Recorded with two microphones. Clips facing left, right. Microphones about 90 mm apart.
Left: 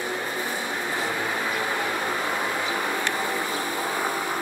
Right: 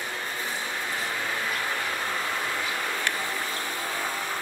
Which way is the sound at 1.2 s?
20° left (ahead or behind).